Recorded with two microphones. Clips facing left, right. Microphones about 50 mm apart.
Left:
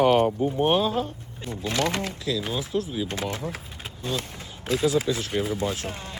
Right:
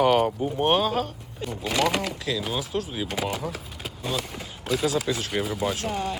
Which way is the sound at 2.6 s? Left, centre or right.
Right.